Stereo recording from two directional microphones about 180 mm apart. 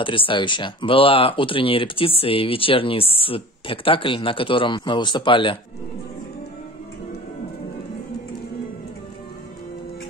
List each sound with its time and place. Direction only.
0.0 s speech: 30° left (ahead or behind)